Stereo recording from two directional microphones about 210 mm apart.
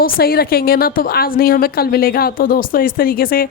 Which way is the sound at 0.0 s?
45° left (ahead or behind).